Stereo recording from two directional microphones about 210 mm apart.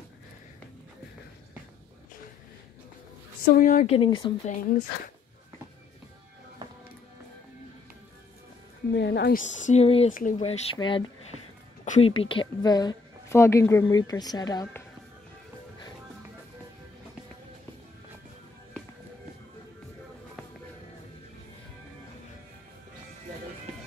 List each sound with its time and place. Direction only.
3.5 s speech: 40° left (ahead or behind)
3.9 s a woman's voice: 25° left (ahead or behind)
4.5 s speech: 40° left (ahead or behind)
8.9 s a woman's voice: 50° left (ahead or behind)
9.4 s speech: 35° left (ahead or behind)
11.8 s music: 35° left (ahead or behind)
12.1 s a woman's voice: 25° left (ahead or behind)